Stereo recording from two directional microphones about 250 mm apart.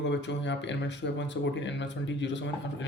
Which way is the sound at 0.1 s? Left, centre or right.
Left.